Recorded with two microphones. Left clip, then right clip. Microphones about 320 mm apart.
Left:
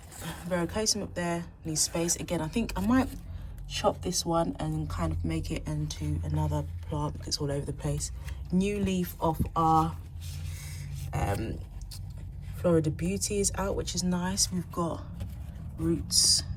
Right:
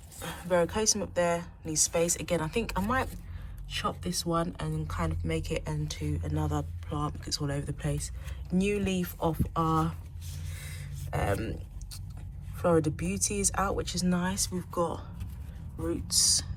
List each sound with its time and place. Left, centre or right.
0.3 s speech: centre
4.1 s speech: centre
11.0 s a sound: centre
12.5 s speech: centre
16.0 s speech: centre